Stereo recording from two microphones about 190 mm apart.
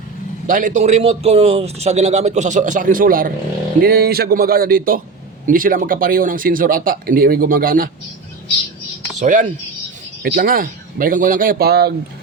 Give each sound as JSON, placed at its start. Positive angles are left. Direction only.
{"t": 0.4, "sound": "a man's voice", "side_deg": -45}
{"t": 9.1, "sound": "speech", "side_deg": -40}
{"t": 10.2, "sound": "speech", "side_deg": -50}